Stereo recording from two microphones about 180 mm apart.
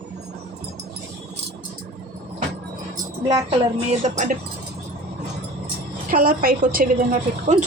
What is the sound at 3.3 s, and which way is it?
A woman's voice, 35° right (ahead or behind).